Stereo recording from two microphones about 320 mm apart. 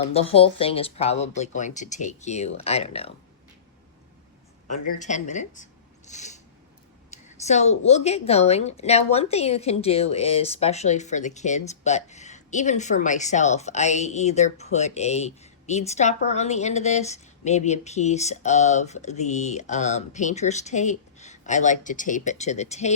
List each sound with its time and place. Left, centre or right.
0.1 s a woman's voice: centre
4.9 s a woman's voice: left